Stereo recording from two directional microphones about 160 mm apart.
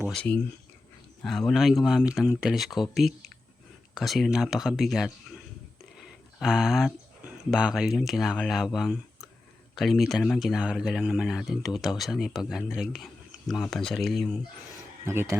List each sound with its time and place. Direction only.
0.1 s speech: 5° left (ahead or behind)
3.9 s speech: centre (ahead or behind)
6.0 s a sound: 5° right (ahead or behind)
7.5 s speech: 5° right (ahead or behind)
15.0 s speech: 15° right (ahead or behind)